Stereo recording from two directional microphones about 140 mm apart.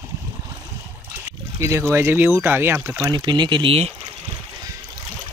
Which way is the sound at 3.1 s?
30° right (ahead or behind).